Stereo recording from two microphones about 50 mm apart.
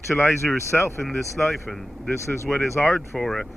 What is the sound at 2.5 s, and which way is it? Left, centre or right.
Speech, left.